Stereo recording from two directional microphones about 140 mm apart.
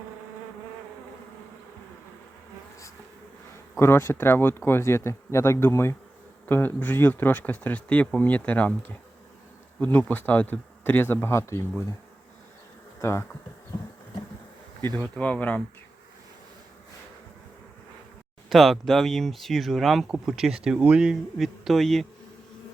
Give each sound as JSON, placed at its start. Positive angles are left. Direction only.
{"t": 3.8, "sound": "speech", "side_deg": 15}
{"t": 13.0, "sound": "bee", "side_deg": 20}
{"t": 14.8, "sound": "speech", "side_deg": 15}
{"t": 18.4, "sound": "speech", "side_deg": 0}